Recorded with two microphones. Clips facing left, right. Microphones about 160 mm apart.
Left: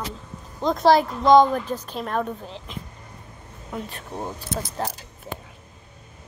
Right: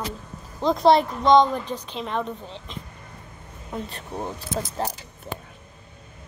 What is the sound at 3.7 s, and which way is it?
Speech, 5° left (ahead or behind).